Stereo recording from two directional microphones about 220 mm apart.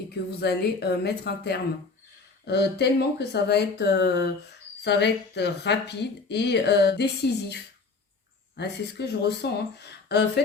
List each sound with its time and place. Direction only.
0.3 s speech: 50° left (ahead or behind)